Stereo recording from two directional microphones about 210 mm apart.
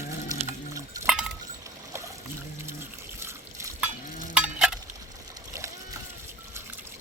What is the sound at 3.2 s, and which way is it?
Liquid, 10° right (ahead or behind).